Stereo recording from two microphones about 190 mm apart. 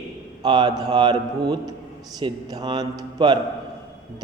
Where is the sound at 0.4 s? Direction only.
20° right (ahead or behind).